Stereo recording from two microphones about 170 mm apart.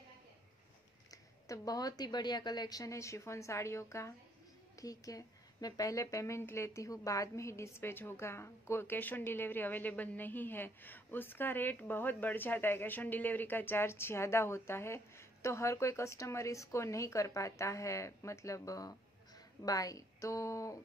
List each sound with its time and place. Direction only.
1.1 s a woman's voice: 20° left (ahead or behind)